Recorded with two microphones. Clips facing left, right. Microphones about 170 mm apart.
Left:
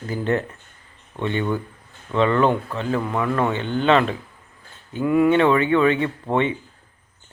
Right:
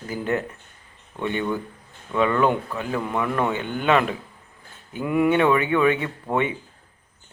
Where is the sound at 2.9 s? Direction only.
25° left (ahead or behind).